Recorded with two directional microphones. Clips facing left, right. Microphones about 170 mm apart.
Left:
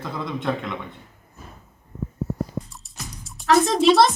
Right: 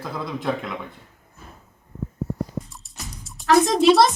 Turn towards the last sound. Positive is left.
turn(degrees=0)  # may be behind; listen again after turning